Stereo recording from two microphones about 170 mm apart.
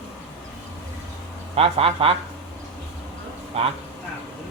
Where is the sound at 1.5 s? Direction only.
35° right (ahead or behind).